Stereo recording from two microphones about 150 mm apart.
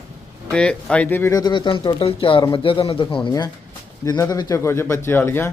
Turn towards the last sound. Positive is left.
turn(degrees=15)  # may be behind; listen again after turning